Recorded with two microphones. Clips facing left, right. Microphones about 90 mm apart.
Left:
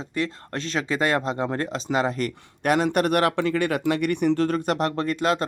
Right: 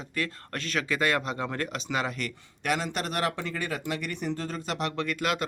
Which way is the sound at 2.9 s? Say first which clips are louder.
Left 9 dB; 55° left (ahead or behind).